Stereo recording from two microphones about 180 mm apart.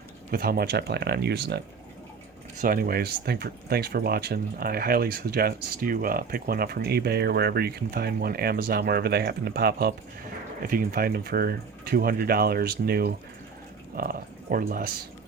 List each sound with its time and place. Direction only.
0.3 s speech: 55° right (ahead or behind)
2.6 s speech: 55° right (ahead or behind)